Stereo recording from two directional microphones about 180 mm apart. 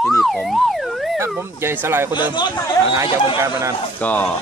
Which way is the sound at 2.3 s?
25° left (ahead or behind).